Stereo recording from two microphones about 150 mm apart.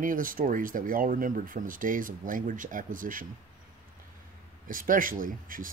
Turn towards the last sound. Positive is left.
turn(degrees=-65)  # may be behind; listen again after turning